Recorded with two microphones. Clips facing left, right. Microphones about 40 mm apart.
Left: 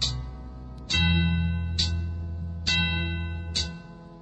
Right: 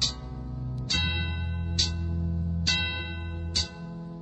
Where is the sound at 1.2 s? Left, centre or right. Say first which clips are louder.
Left 6 dB; left.